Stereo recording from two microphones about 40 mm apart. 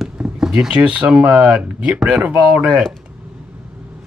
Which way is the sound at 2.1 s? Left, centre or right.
Right.